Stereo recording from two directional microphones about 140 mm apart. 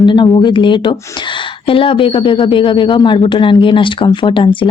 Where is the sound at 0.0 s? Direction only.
35° left (ahead or behind).